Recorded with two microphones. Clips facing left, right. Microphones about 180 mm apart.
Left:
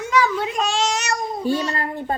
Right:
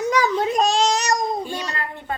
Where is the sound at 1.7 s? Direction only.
35° left (ahead or behind).